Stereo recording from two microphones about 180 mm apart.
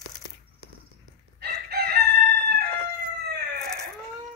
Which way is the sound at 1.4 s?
60° right (ahead or behind).